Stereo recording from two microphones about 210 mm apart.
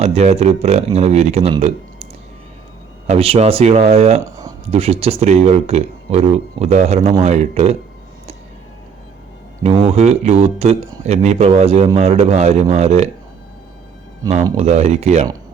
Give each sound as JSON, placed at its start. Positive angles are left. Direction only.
{"t": 0.0, "sound": "speech", "side_deg": -30}
{"t": 3.1, "sound": "speech", "side_deg": -25}
{"t": 4.2, "sound": "a sound", "side_deg": -15}
{"t": 4.6, "sound": "speech", "side_deg": -30}
{"t": 9.6, "sound": "speech", "side_deg": -30}
{"t": 14.5, "sound": "speech", "side_deg": -30}